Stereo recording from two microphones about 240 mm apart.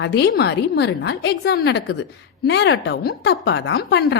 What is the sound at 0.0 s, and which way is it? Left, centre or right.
A woman's voice, left.